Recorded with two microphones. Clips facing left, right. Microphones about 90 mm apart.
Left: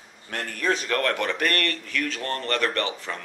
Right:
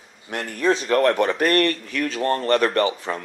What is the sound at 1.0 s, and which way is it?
A man's voice, 30° right (ahead or behind).